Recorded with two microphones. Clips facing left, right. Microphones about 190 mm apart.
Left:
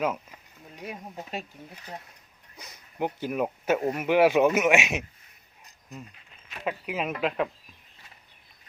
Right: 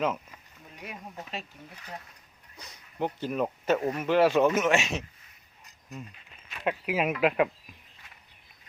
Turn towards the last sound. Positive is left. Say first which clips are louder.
# right 3 dB
turn(degrees=-5)  # may be behind; listen again after turning